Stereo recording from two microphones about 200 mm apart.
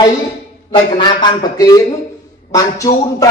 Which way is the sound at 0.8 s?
25° left (ahead or behind).